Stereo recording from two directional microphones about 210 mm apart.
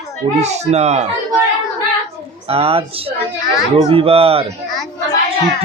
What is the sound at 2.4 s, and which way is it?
Speech, 30° right (ahead or behind).